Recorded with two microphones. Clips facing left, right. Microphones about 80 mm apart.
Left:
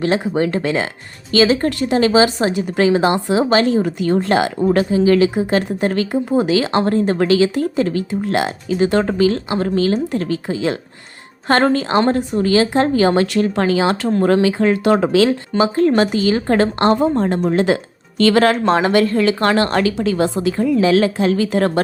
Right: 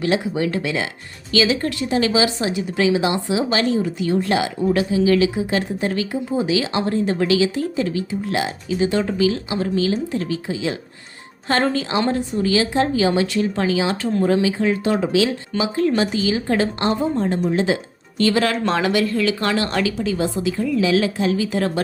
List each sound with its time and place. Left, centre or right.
0.0 s a woman's voice: left
18.3 s a woman's voice: left
20.0 s a woman's voice: left